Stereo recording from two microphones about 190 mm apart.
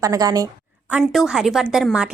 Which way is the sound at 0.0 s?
15° right (ahead or behind).